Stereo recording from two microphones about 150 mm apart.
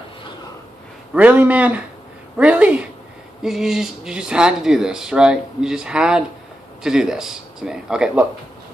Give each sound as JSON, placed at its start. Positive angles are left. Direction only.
{"t": 1.1, "sound": "a man's voice", "side_deg": -10}